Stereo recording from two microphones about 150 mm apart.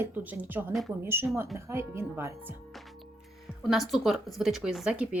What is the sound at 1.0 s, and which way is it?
Speech, 15° right (ahead or behind).